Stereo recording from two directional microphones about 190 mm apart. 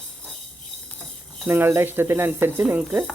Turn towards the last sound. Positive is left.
turn(degrees=-10)  # may be behind; listen again after turning